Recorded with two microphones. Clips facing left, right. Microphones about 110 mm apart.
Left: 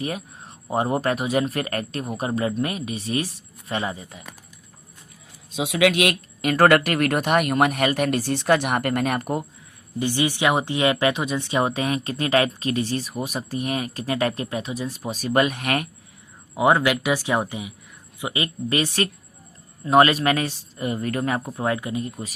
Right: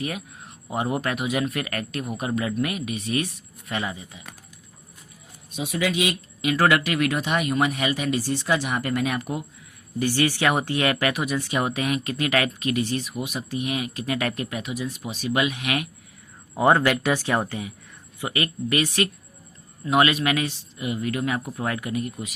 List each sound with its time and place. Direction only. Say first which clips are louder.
0.0 s speech: left 2 dB; 35° left (ahead or behind)
5.5 s speech: left 5 dB; 90° left; by 9.4 s 50° left (ahead or behind)
10.0 s speech: even; 20° left (ahead or behind); by 15.9 s 45° left (ahead or behind)
16.6 s speech: even; 5° left (ahead or behind); by 22.4 s 30° left (ahead or behind)